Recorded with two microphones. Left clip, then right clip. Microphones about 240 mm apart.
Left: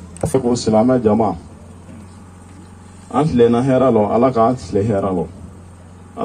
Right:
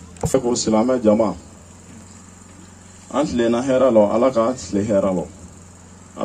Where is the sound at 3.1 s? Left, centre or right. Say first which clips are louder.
Left 5 dB; right.